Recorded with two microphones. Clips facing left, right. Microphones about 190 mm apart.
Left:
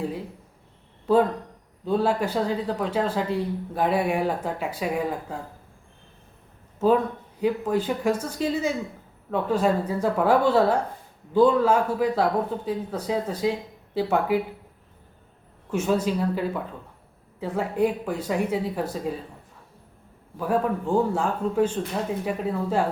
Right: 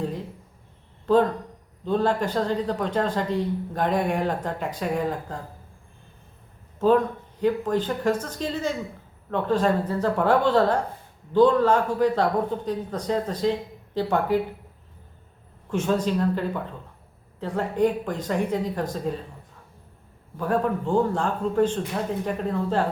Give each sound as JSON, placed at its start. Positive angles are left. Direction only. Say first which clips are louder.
{"t": 1.0, "sound": "a man's voice", "louder": "even", "side_deg": 10}
{"t": 6.7, "sound": "a man's voice", "louder": "right 1 dB", "side_deg": 10}
{"t": 15.7, "sound": "a man's voice", "louder": "even", "side_deg": 10}
{"t": 20.3, "sound": "a man's voice", "louder": "even", "side_deg": 5}